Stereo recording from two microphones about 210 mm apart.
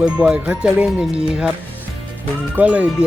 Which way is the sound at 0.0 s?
5° right (ahead or behind).